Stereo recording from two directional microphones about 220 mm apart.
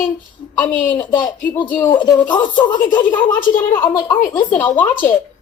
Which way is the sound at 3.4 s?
40° left (ahead or behind).